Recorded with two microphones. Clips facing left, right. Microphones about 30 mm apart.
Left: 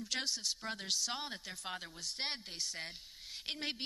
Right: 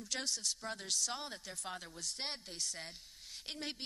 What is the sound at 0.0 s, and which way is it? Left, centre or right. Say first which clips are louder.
Speech: left 2 dB; centre.